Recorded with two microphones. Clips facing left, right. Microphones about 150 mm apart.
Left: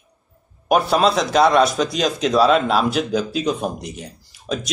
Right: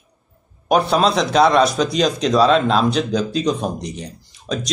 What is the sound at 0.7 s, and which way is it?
Speech, 5° left (ahead or behind).